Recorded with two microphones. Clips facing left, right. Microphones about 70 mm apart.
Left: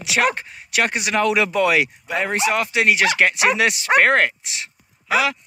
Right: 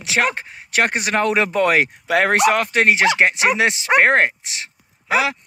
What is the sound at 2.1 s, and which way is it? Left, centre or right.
Speech, right.